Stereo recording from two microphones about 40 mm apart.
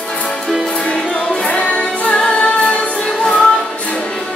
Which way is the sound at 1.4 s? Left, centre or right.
Left.